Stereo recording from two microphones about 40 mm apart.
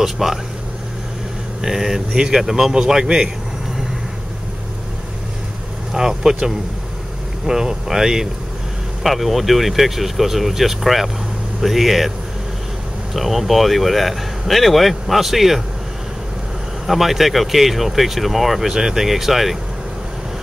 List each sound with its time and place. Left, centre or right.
0.0 s speech: centre
1.6 s a man's voice: centre
5.9 s speech: centre
9.0 s speech: centre
13.1 s speech: centre
16.8 s speech: centre